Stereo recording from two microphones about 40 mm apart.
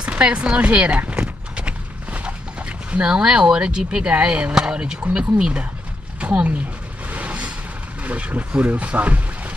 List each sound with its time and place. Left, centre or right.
0.1 s speech: right
1.5 s clip-clop: right
2.6 s speech: right
4.6 s speech: right
7.1 s a sound: right
8.0 s speech: right